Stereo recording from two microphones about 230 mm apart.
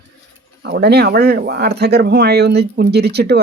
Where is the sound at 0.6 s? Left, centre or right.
Right.